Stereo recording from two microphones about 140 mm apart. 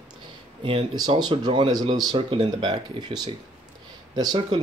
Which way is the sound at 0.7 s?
35° right (ahead or behind).